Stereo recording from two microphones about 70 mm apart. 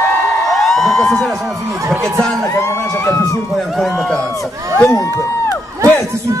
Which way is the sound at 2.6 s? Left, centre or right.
Left.